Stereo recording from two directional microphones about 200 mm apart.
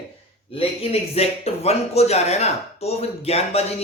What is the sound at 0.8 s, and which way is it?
A man's voice, 30° left (ahead or behind).